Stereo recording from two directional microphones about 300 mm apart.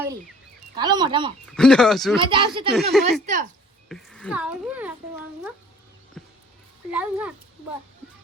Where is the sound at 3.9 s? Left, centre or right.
Centre.